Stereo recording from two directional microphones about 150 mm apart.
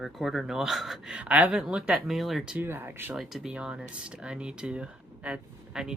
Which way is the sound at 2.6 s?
15° right (ahead or behind).